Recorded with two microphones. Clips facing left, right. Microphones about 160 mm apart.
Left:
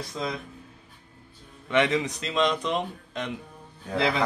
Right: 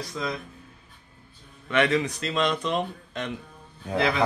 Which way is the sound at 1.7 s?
20° left (ahead or behind).